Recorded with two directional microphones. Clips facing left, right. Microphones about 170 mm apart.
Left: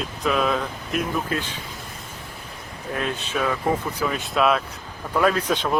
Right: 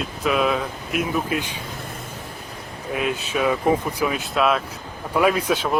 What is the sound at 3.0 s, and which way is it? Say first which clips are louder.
Speech: right 3 dB; 5° right (ahead or behind).